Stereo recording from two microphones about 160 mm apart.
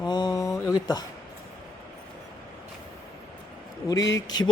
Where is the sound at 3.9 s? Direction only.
25° left (ahead or behind).